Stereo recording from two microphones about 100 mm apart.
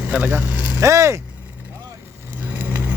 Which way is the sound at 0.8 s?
30° right (ahead or behind).